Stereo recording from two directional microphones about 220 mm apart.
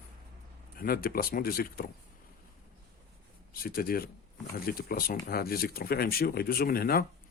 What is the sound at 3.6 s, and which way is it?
Speech, 40° left (ahead or behind).